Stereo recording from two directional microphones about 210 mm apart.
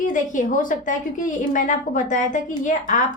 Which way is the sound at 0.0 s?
40° left (ahead or behind).